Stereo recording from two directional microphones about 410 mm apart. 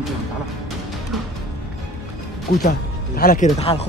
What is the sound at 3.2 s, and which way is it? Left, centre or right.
Speech, centre.